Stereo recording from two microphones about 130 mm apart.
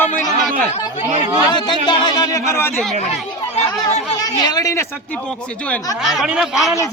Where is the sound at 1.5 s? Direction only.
35° left (ahead or behind); by 2.8 s 20° left (ahead or behind).